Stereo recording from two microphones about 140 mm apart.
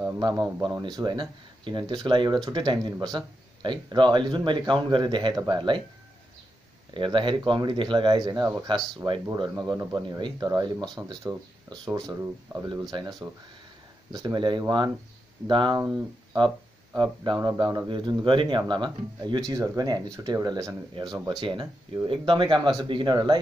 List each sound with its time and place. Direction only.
0.2 s speech: 30° right (ahead or behind)
6.9 s speech: 35° right (ahead or behind)
9.6 s speech: 20° right (ahead or behind)
9.9 s speech: 35° right (ahead or behind)